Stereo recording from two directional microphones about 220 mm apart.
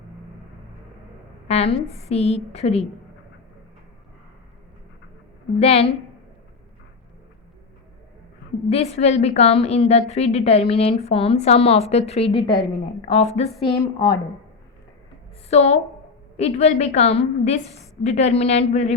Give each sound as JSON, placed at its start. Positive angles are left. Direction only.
{"t": 1.5, "sound": "a woman's voice", "side_deg": 30}
{"t": 5.5, "sound": "a woman's voice", "side_deg": 30}
{"t": 8.7, "sound": "a woman's voice", "side_deg": 30}
{"t": 13.8, "sound": "a woman's voice", "side_deg": 15}
{"t": 15.4, "sound": "a woman's voice", "side_deg": 30}